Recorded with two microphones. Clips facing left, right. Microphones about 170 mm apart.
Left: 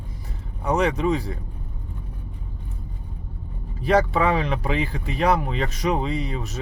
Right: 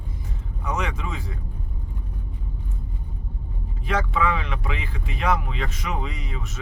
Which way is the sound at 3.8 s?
35° left (ahead or behind).